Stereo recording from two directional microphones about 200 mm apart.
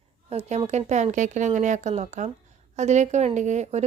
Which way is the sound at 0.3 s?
35° right (ahead or behind).